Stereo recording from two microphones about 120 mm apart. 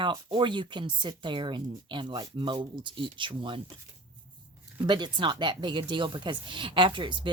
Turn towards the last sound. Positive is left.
turn(degrees=-40)  # may be behind; listen again after turning